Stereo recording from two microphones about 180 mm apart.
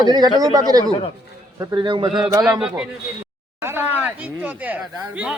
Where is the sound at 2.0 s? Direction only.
5° right (ahead or behind).